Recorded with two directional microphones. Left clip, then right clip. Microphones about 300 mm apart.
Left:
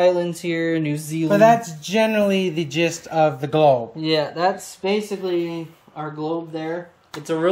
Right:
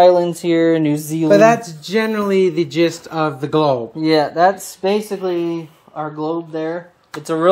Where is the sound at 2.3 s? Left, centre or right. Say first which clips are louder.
Right 7 dB; centre.